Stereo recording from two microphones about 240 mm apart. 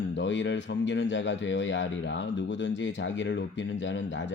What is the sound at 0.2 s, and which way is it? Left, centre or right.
A man's voice, left.